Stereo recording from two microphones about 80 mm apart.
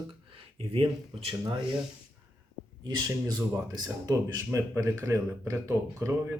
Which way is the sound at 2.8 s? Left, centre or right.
Right.